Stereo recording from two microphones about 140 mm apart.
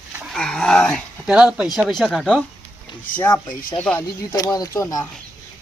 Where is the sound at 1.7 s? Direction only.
Centre (ahead or behind).